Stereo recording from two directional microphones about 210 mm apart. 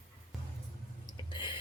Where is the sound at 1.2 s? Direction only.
20° left (ahead or behind).